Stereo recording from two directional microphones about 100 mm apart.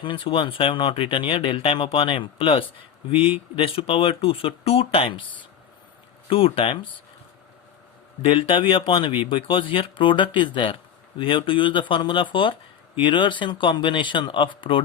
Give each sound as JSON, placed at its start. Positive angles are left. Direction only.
{"t": 0.0, "sound": "speech", "side_deg": 60}
{"t": 8.2, "sound": "speech", "side_deg": 60}